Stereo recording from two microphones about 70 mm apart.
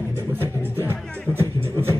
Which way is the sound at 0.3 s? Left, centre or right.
Right.